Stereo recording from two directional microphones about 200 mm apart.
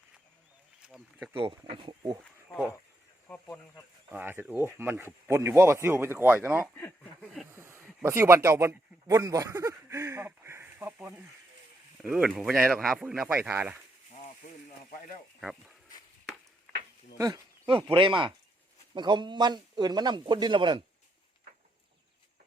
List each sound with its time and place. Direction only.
0.8 s speech: centre (ahead or behind)
1.4 s a man's voice: 25° right (ahead or behind)
3.2 s speech: 5° left (ahead or behind)
4.1 s speech: 10° right (ahead or behind)
6.7 s speech: 5° left (ahead or behind)
7.5 s speech: 10° right (ahead or behind)
14.8 s speech: 40° left (ahead or behind)
15.4 s speech: centre (ahead or behind)
17.2 s a man's voice: 20° right (ahead or behind)